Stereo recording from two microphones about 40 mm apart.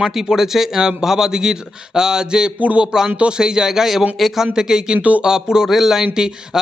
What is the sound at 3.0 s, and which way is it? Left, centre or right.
Speech, right.